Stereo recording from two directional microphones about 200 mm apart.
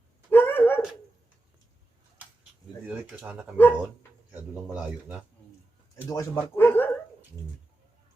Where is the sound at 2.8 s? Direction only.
5° right (ahead or behind).